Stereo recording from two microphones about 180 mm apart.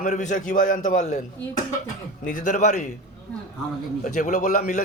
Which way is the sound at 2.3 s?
45° left (ahead or behind).